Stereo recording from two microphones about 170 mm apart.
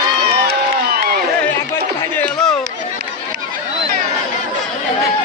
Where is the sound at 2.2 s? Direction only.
5° left (ahead or behind).